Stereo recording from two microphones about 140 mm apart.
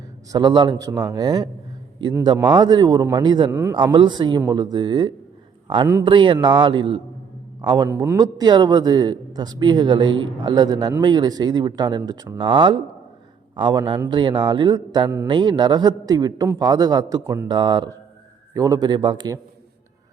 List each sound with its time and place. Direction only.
0.3 s a man's voice: 30° right (ahead or behind)
3.5 s a man's voice: 15° right (ahead or behind)
3.9 s a man's voice: 35° right (ahead or behind)